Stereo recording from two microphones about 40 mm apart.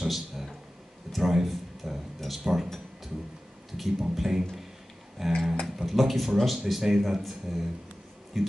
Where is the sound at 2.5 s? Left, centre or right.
Centre.